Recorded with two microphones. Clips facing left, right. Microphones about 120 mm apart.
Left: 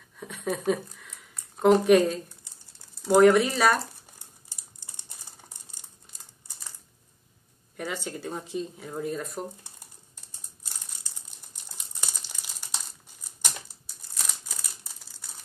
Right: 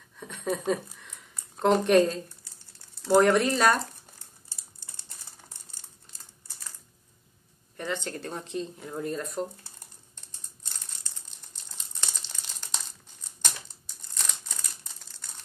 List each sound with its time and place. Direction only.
0.3 s speech: 5° left (ahead or behind)
3.2 s speech: 5° left (ahead or behind)
4.5 s typing: 15° left (ahead or behind)
7.7 s speech: 10° left (ahead or behind)
10.6 s crumpling: 10° left (ahead or behind)